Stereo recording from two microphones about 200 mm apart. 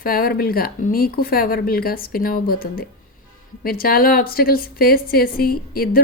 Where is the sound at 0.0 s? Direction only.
45° left (ahead or behind).